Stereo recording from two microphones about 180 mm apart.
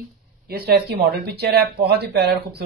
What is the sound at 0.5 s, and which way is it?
Speech, 55° right (ahead or behind).